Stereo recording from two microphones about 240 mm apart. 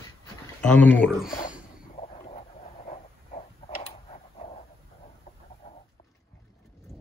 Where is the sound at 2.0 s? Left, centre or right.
Left.